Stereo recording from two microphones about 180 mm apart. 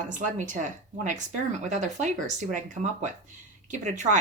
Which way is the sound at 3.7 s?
45° right (ahead or behind).